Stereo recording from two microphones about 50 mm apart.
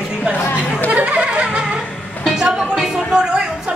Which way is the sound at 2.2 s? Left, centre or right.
Centre.